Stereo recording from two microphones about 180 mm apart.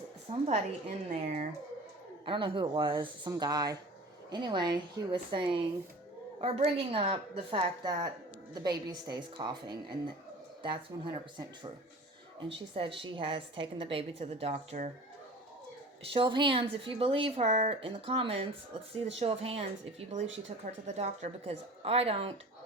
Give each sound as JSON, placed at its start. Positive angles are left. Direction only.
{"t": 0.3, "sound": "a woman's voice", "side_deg": -35}
{"t": 16.1, "sound": "a woman's voice", "side_deg": -25}